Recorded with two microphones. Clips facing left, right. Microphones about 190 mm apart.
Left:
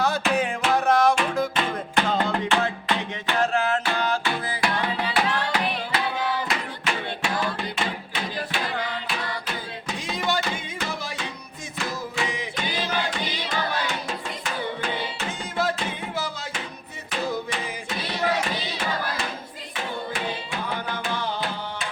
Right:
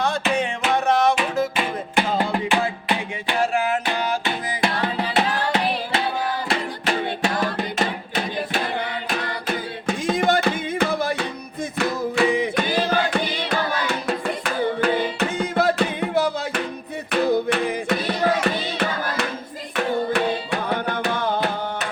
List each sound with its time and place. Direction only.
0.0 s music: 5° left (ahead or behind); by 6.0 s 25° right (ahead or behind)
6.5 s music: 40° right (ahead or behind); by 19.3 s 65° right (ahead or behind)
20.1 s tabla: 60° right (ahead or behind)